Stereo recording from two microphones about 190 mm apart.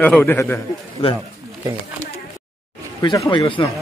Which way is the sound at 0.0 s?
10° left (ahead or behind).